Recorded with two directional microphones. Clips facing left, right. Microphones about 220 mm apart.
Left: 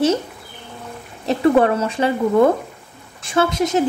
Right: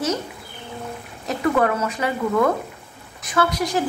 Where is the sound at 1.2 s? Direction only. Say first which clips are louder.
Left 5 dB; 30° left (ahead or behind).